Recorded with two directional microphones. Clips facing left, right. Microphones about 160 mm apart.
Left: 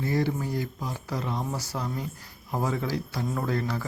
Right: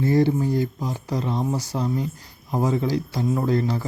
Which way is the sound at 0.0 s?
25° right (ahead or behind).